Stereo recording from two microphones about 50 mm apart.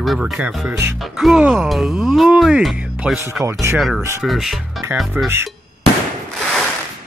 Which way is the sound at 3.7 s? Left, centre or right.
Centre.